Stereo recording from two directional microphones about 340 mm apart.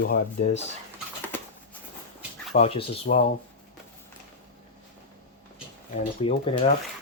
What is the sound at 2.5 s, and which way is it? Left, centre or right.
Speech, centre.